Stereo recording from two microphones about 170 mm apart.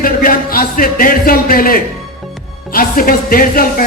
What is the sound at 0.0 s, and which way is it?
A man's voice, 55° left (ahead or behind).